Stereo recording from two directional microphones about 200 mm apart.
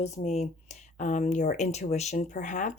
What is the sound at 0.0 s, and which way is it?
Speech, 30° left (ahead or behind).